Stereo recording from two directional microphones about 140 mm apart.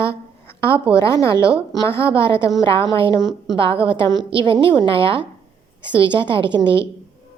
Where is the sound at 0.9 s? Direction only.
20° left (ahead or behind).